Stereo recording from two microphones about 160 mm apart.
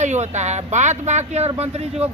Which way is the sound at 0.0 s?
45° right (ahead or behind).